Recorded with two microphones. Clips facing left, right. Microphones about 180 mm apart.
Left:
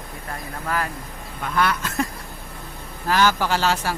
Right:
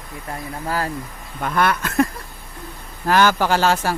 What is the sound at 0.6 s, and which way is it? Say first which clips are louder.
Speech: right 2 dB; 30° right (ahead or behind).